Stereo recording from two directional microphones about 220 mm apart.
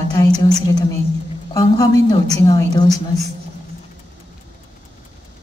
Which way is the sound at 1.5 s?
15° left (ahead or behind).